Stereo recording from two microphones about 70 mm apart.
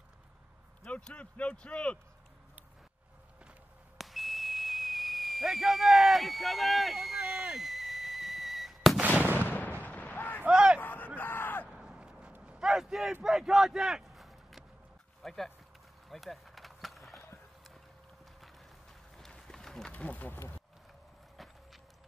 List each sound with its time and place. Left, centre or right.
0.8 s speech: centre
4.0 s whistle: centre
7.5 s a sound: centre
9.2 s gunshot: right
9.5 s artillery fire: left
10.4 s a sound: centre
10.8 s a sound: left
11.7 s a sound: centre
12.6 s a man's voice: centre
16.1 s skateboard: centre
19.1 s run: centre
20.1 s speech: left